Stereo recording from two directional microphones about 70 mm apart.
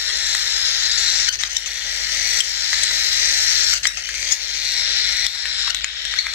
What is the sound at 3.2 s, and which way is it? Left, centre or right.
Camera, right.